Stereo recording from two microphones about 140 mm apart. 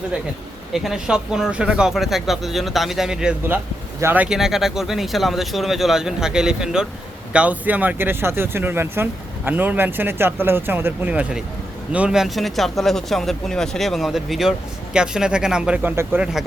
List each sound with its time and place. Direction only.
0.7 s speech: 5° right (ahead or behind)